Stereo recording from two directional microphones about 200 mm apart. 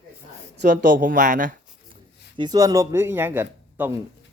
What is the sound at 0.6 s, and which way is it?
Speech, 40° right (ahead or behind).